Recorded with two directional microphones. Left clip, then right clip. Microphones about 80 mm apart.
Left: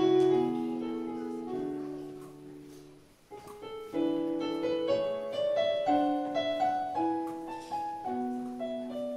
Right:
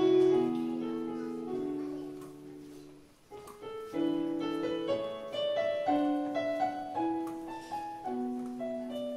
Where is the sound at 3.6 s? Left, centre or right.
Centre.